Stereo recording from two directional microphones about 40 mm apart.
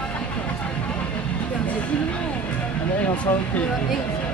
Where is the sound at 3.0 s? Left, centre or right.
Left.